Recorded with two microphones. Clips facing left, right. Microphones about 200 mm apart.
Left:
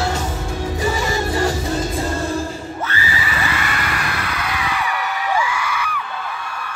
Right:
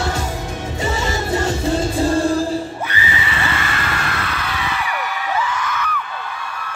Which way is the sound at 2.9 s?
20° right (ahead or behind).